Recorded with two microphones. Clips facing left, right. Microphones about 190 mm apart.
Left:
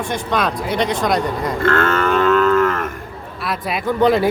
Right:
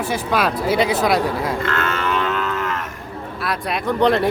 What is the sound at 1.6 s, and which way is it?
Livestock, 50° left (ahead or behind).